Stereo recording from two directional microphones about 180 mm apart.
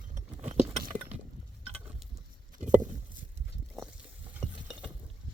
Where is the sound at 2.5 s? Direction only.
45° right (ahead or behind).